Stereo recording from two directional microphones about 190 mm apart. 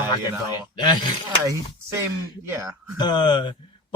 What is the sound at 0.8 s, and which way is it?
Speech, 25° left (ahead or behind).